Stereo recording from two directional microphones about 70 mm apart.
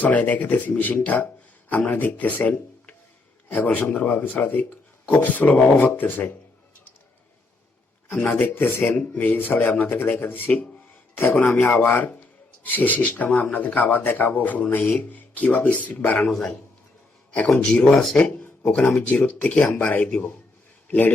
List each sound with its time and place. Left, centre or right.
0.0 s a man's voice: left
8.2 s a man's voice: left
10.4 s speech: centre
11.6 s a man's voice: left
16.3 s a man's voice: centre
20.8 s a sound: centre